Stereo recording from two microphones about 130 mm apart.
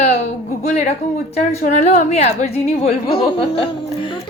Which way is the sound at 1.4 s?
70° left (ahead or behind).